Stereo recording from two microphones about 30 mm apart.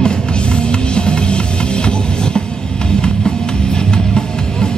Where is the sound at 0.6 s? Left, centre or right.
Left.